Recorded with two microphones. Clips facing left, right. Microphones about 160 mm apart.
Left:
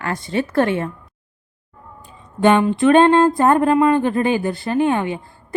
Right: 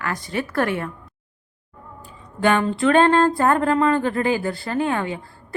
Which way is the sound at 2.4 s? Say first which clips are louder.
Left 5 dB; 20° left (ahead or behind).